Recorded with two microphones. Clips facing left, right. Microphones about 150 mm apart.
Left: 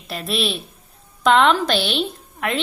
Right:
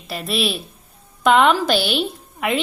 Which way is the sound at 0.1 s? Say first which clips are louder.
Right 1 dB; centre (ahead or behind).